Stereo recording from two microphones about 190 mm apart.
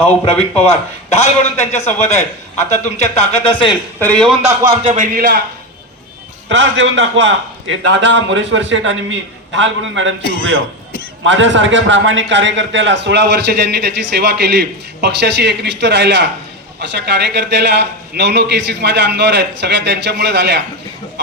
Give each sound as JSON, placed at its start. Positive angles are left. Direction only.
{"t": 0.0, "sound": "a man's voice", "side_deg": 30}
{"t": 4.0, "sound": "speech", "side_deg": 5}
{"t": 4.4, "sound": "speech", "side_deg": -30}
{"t": 6.5, "sound": "a man's voice", "side_deg": -80}
{"t": 11.2, "sound": "a man's voice", "side_deg": -70}